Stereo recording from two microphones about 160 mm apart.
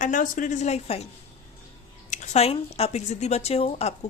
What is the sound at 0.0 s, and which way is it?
A woman's voice, 55° left (ahead or behind).